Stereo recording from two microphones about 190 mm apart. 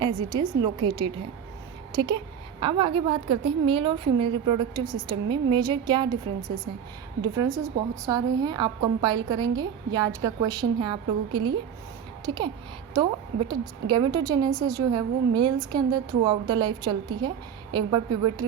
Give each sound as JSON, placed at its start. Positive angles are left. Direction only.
{"t": 0.3, "sound": "a woman's voice", "side_deg": -20}
{"t": 7.2, "sound": "a woman's voice", "side_deg": -20}